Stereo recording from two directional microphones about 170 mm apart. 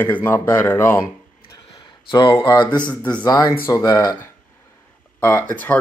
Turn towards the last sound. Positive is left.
turn(degrees=10)  # may be behind; listen again after turning